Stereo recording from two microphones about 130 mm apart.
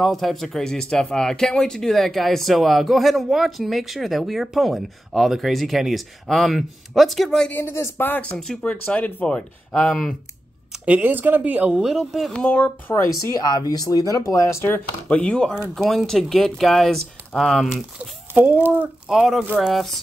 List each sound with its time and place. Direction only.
0.0 s speech: centre (ahead or behind)
8.4 s speech: 5° left (ahead or behind)
10.7 s speech: 10° right (ahead or behind); by 13.0 s 10° left (ahead or behind)
13.3 s speech: 30° left (ahead or behind); by 17.8 s centre (ahead or behind)
18.3 s speech: 15° right (ahead or behind)
19.7 s speech: centre (ahead or behind)